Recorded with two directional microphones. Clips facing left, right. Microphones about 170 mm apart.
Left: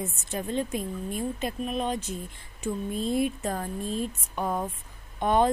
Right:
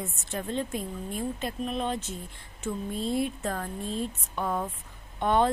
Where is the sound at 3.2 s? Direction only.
15° left (ahead or behind).